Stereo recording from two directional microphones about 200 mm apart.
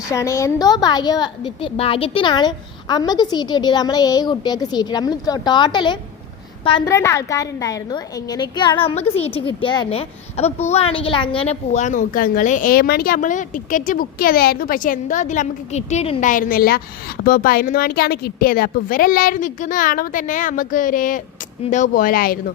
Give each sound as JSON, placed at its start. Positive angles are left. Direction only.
{"t": 0.1, "sound": "a woman's voice", "side_deg": 15}
{"t": 16.3, "sound": "a woman's voice", "side_deg": 45}